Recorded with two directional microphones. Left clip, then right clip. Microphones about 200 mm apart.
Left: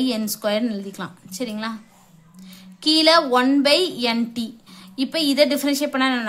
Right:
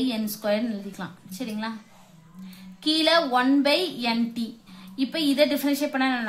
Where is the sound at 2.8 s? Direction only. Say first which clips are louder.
Left 5 dB; 30° left (ahead or behind).